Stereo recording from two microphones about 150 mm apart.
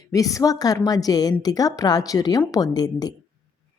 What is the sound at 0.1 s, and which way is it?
Speech, 20° left (ahead or behind).